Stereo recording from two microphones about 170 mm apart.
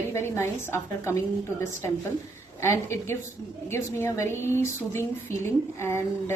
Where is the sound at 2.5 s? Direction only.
15° left (ahead or behind).